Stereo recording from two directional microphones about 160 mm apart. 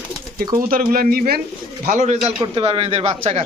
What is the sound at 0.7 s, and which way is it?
Speech, 65° right (ahead or behind).